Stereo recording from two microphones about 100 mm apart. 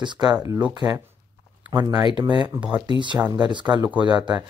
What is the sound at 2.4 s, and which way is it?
Speech, 15° right (ahead or behind).